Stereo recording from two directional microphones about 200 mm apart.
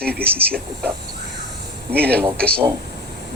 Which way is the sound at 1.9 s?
50° right (ahead or behind).